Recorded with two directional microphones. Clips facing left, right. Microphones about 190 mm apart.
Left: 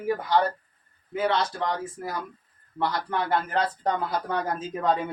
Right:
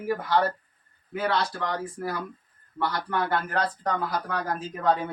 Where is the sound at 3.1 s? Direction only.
25° left (ahead or behind).